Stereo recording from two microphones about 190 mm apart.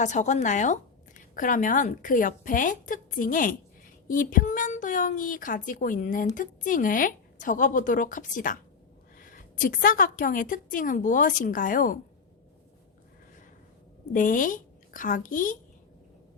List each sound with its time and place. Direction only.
0.0 s a woman's voice: 40° left (ahead or behind)
14.1 s a woman's voice: 45° left (ahead or behind)